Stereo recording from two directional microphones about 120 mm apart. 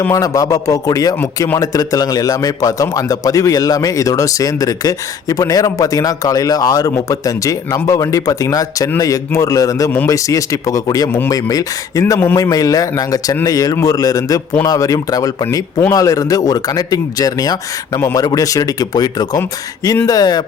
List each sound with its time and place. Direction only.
0.0 s a man's voice: 25° left (ahead or behind)